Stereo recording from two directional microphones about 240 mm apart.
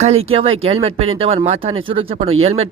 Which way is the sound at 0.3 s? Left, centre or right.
Right.